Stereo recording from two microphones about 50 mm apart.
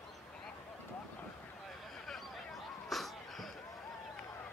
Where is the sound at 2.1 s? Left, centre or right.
Centre.